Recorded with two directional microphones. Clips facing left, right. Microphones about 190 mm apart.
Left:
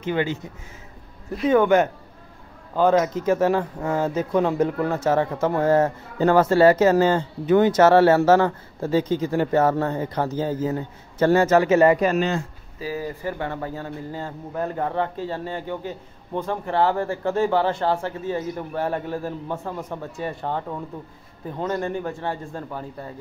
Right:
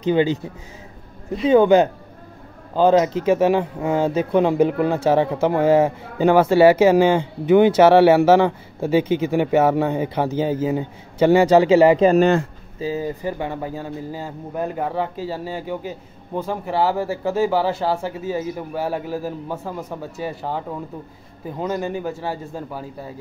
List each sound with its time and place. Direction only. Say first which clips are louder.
1.4 s speech: right 4 dB; 30° right (ahead or behind)
5.5 s speech: right 3 dB; 10° right (ahead or behind)
12.2 s speech: right 7 dB; 60° right (ahead or behind)
12.8 s speech: right 4 dB; 20° right (ahead or behind)